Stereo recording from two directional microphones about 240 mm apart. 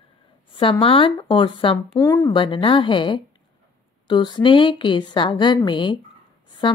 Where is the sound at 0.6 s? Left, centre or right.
Left.